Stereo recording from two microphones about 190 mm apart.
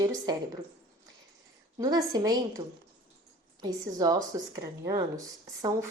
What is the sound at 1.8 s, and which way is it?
A woman's voice, 20° right (ahead or behind).